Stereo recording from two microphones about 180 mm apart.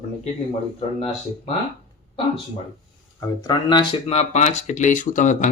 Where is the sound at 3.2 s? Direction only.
20° left (ahead or behind).